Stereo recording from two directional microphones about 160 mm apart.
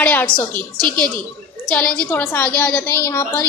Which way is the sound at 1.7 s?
5° left (ahead or behind).